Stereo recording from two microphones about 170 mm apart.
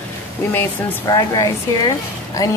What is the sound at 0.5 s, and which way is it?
Speech, 10° left (ahead or behind).